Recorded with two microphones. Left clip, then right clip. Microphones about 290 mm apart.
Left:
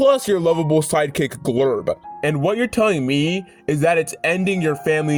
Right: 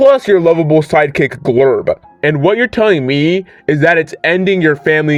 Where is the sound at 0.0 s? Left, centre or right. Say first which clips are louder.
Right 8 dB; left.